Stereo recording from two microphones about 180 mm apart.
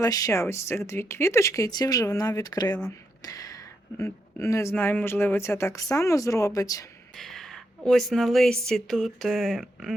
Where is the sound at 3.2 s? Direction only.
20° left (ahead or behind).